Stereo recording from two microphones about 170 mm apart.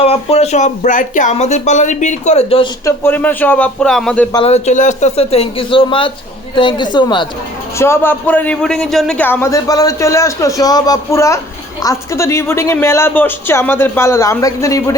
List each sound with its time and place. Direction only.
0.0 s speech: 35° left (ahead or behind)
2.8 s a man's voice: 15° left (ahead or behind)
4.4 s a woman's voice: 40° left (ahead or behind)
7.8 s a man's voice: 15° left (ahead or behind)